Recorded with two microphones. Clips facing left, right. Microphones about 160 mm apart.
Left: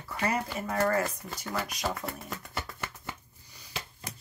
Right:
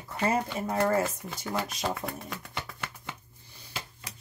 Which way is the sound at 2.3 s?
Centre (ahead or behind).